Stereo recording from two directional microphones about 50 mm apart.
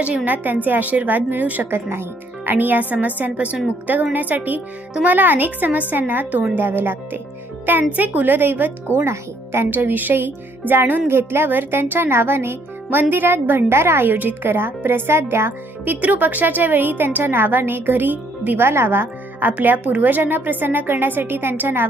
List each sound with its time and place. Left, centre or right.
0.3 s a woman's voice: right
1.7 s speech: right
2.5 s a woman's voice: right
9.0 s speech: right
9.6 s a woman's voice: right
13.7 s speech: right
14.1 s speech: right
15.8 s a woman's voice: right